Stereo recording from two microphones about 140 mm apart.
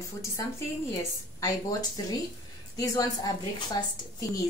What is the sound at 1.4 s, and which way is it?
A woman's voice, 30° left (ahead or behind).